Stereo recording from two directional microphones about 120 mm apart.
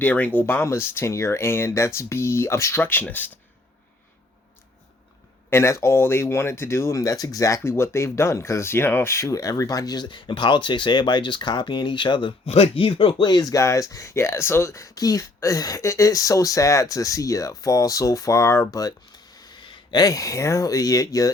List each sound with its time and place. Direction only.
0.0 s speech: 15° left (ahead or behind)
5.5 s speech: 20° left (ahead or behind); by 12.3 s 40° left (ahead or behind)
12.5 s speech: 55° left (ahead or behind); by 21.3 s 30° left (ahead or behind)